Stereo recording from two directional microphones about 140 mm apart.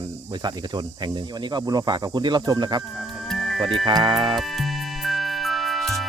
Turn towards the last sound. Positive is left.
turn(degrees=0)  # may be behind; listen again after turning